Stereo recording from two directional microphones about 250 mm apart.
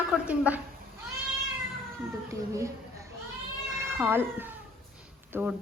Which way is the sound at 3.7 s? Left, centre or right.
Centre.